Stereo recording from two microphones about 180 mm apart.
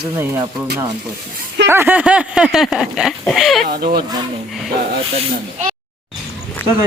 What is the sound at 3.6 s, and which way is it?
Speech, 55° right (ahead or behind).